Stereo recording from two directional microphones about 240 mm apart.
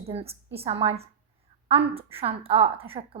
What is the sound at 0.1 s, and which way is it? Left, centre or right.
A woman's voice, right.